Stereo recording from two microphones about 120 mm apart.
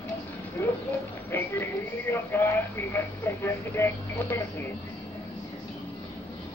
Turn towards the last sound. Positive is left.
turn(degrees=15)  # may be behind; listen again after turning